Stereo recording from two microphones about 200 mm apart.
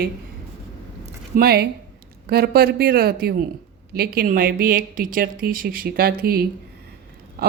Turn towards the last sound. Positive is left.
turn(degrees=-50)  # may be behind; listen again after turning